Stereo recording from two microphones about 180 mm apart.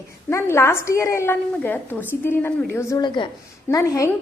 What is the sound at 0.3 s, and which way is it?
A woman's voice, 15° left (ahead or behind).